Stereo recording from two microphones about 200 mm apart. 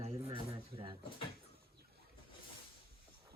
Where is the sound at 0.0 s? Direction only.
30° right (ahead or behind).